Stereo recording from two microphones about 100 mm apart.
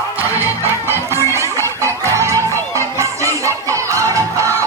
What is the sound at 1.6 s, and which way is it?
Music, 30° right (ahead or behind).